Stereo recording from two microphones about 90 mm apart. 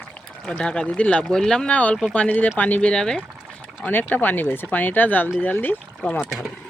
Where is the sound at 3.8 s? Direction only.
20° left (ahead or behind).